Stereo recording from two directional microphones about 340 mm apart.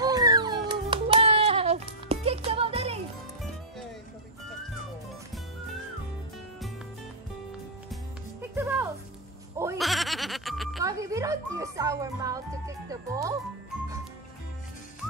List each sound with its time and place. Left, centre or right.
0.0 s music: centre
7.9 s music: centre
9.6 s bleat: centre